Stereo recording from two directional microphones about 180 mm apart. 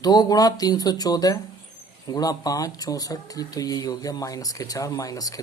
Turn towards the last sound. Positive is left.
turn(degrees=20)  # may be behind; listen again after turning